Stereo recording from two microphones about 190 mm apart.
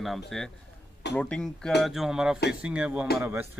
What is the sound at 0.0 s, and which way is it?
Speech, centre (ahead or behind).